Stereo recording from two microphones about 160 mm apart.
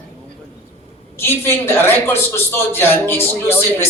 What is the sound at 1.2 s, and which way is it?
A man's voice, 15° left (ahead or behind).